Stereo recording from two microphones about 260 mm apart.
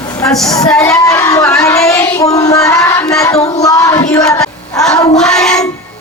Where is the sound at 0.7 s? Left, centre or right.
Centre.